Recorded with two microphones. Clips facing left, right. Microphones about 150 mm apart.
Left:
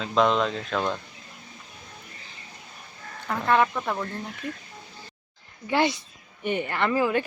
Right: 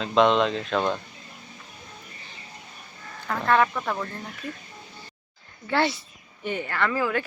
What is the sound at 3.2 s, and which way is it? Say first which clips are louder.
Speech: even; 10° left (ahead or behind).